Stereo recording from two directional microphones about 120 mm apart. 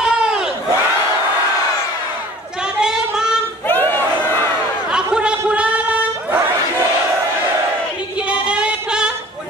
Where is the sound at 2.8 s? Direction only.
5° right (ahead or behind).